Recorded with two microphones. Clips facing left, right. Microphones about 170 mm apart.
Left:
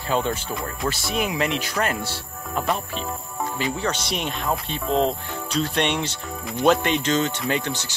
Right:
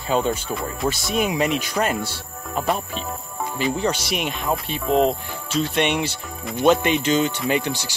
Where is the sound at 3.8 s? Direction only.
10° right (ahead or behind).